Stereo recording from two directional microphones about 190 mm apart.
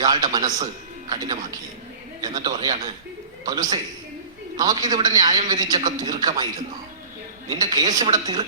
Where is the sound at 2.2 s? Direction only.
25° right (ahead or behind).